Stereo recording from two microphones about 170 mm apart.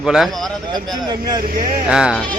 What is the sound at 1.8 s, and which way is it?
Speech, 5° right (ahead or behind).